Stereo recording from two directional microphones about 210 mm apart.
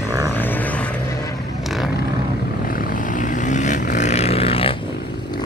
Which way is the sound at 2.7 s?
40° left (ahead or behind).